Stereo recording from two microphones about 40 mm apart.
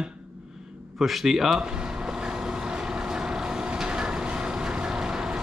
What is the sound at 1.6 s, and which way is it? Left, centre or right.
Vehicle, right.